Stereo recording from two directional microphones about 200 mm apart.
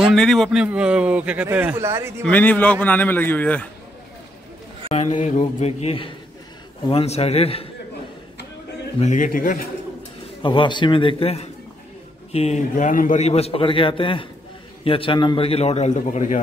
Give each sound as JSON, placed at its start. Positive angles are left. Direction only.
{"t": 0.0, "sound": "a man's voice", "side_deg": 0}
{"t": 2.2, "sound": "a man's voice", "side_deg": 10}
{"t": 4.8, "sound": "a man's voice", "side_deg": 30}
{"t": 9.0, "sound": "a man's voice", "side_deg": 40}
{"t": 10.4, "sound": "a man's voice", "side_deg": 25}